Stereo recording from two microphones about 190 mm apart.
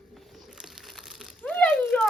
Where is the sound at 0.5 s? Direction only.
Centre (ahead or behind).